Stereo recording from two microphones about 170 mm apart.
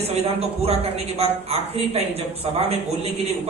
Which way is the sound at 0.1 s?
35° right (ahead or behind).